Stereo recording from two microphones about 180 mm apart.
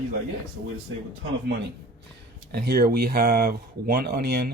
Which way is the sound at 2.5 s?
60° right (ahead or behind).